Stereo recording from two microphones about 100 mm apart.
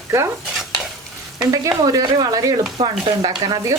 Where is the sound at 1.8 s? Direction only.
35° right (ahead or behind).